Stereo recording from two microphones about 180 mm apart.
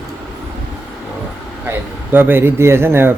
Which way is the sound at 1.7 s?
10° right (ahead or behind).